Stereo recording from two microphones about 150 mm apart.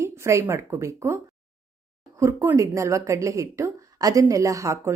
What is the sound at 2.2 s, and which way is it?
A woman's voice, 20° right (ahead or behind).